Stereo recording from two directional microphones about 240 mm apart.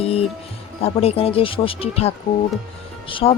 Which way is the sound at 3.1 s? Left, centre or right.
Left.